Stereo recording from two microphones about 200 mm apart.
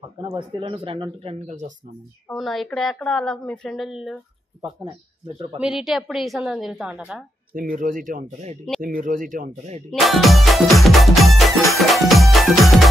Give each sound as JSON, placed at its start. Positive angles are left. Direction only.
{"t": 0.3, "sound": "speech", "side_deg": -25}
{"t": 2.2, "sound": "a woman's voice", "side_deg": 0}
{"t": 5.6, "sound": "a woman's voice", "side_deg": -5}
{"t": 7.5, "sound": "speech", "side_deg": -45}
{"t": 9.8, "sound": "music", "side_deg": 0}